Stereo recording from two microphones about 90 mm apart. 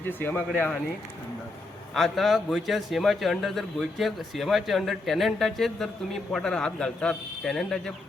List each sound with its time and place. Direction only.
0.0 s speech: 25° left (ahead or behind)
1.9 s a man's voice: centre (ahead or behind)